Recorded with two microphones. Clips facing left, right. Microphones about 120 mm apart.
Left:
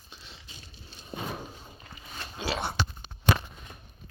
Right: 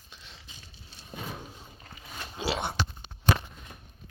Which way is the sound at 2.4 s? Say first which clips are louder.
Right 1 dB; 15° right (ahead or behind).